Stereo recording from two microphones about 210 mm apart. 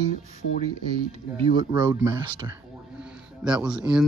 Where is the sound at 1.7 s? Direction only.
15° right (ahead or behind).